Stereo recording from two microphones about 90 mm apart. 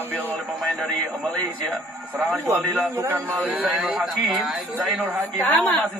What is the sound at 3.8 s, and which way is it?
Speech, 5° right (ahead or behind).